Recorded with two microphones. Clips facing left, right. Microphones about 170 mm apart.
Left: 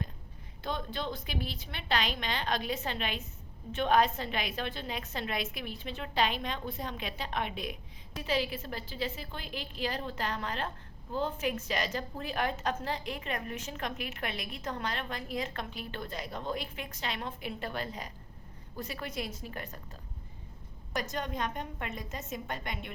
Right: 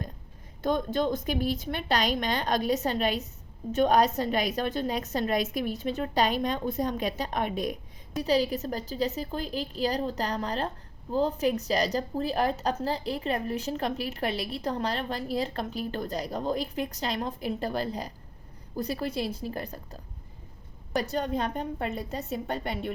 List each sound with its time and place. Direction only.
0.6 s a woman's voice: 45° right (ahead or behind)